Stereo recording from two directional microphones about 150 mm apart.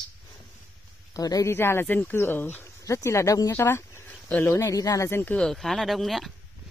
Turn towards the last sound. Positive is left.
turn(degrees=0)  # may be behind; listen again after turning